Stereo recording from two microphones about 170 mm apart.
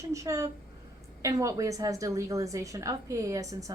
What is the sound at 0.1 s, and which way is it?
A woman's voice, 20° right (ahead or behind).